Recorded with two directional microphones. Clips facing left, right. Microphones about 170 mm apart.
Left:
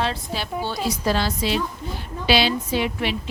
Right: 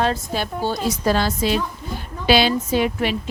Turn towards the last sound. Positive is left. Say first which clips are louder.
# right 4 dB
turn(degrees=-45)  # may be behind; listen again after turning